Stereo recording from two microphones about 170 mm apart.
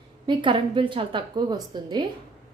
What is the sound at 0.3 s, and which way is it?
A woman's voice, 30° right (ahead or behind).